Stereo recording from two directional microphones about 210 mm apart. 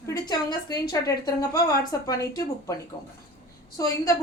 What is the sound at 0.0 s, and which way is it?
A woman's voice, 20° left (ahead or behind).